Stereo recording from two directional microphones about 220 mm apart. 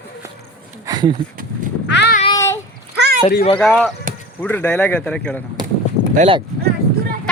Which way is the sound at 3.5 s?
Centre (ahead or behind).